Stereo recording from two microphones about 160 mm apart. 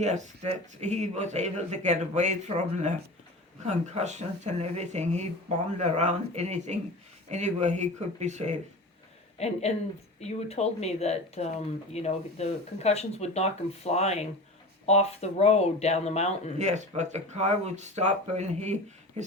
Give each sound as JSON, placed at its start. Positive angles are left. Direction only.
{"t": 0.0, "sound": "speech", "side_deg": -45}
{"t": 9.4, "sound": "speech", "side_deg": 40}
{"t": 16.6, "sound": "speech", "side_deg": -45}